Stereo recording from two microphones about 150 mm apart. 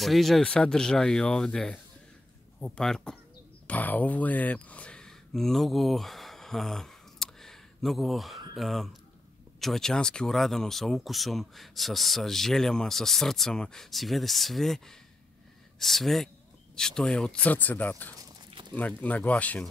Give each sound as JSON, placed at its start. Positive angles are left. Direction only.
{"t": 0.0, "sound": "speech", "side_deg": 0}